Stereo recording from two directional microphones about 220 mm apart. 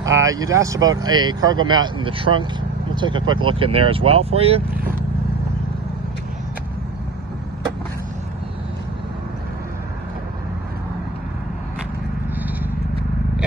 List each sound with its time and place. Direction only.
0.0 s speech: 15° right (ahead or behind)